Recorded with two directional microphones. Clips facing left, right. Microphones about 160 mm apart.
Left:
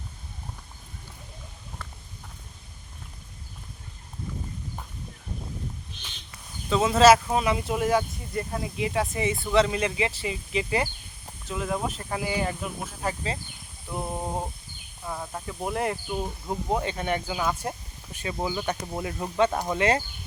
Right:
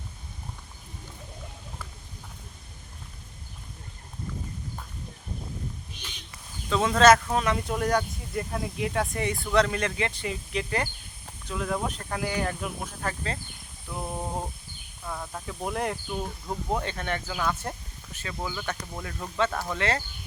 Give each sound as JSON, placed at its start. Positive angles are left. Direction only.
{"t": 6.7, "sound": "speech", "side_deg": 5}
{"t": 16.0, "sound": "speech", "side_deg": 15}